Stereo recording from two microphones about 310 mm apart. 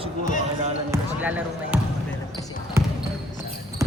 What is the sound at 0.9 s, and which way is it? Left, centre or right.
Speech, centre.